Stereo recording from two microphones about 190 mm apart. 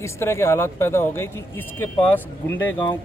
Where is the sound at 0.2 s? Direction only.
15° left (ahead or behind).